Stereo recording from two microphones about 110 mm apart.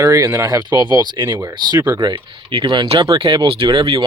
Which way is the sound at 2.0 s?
50° right (ahead or behind).